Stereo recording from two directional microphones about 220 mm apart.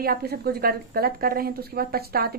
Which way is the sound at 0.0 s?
45° right (ahead or behind).